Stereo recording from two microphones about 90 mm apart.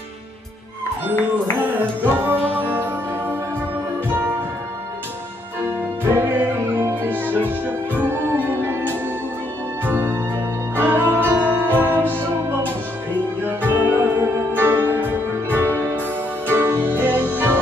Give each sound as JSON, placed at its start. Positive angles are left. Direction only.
{"t": 1.6, "sound": "music", "side_deg": -20}
{"t": 5.7, "sound": "music", "side_deg": -25}
{"t": 9.8, "sound": "music", "side_deg": -20}
{"t": 13.4, "sound": "music", "side_deg": -25}